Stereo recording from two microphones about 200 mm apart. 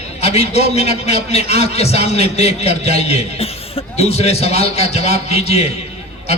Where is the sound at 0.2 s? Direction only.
30° left (ahead or behind).